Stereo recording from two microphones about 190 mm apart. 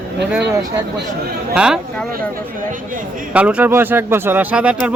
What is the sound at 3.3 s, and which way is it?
Speech, 5° right (ahead or behind).